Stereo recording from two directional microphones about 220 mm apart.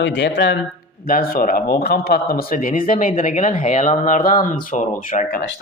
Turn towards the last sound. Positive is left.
turn(degrees=40)  # may be behind; listen again after turning